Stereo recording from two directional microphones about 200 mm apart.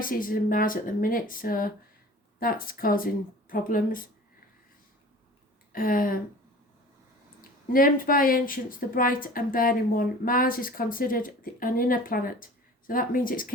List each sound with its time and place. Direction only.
0.0 s speech: 45° left (ahead or behind)
5.7 s speech: 45° left (ahead or behind)
7.7 s speech: 45° left (ahead or behind)